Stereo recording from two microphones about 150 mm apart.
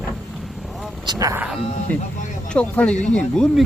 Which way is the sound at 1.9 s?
10° left (ahead or behind).